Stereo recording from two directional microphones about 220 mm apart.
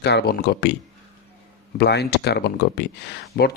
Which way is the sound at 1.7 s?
50° left (ahead or behind).